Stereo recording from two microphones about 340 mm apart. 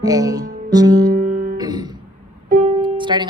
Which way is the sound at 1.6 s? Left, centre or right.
Centre.